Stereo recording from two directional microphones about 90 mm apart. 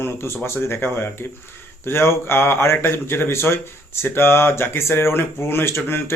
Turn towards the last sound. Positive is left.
turn(degrees=30)  # may be behind; listen again after turning